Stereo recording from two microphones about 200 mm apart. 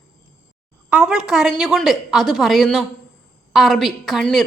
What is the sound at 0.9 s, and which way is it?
A woman's voice, 5° right (ahead or behind).